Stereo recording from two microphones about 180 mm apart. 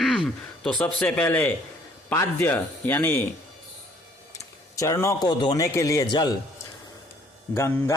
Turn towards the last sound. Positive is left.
turn(degrees=15)  # may be behind; listen again after turning